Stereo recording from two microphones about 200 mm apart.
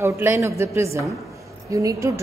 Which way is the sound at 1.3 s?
15° right (ahead or behind).